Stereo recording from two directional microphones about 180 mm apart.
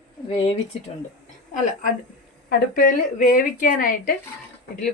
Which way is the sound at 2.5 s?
50° left (ahead or behind).